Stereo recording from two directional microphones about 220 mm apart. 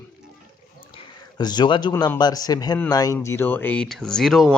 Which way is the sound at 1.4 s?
20° left (ahead or behind).